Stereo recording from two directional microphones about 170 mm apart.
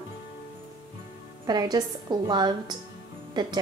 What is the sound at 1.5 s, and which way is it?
A woman's voice, 25° right (ahead or behind).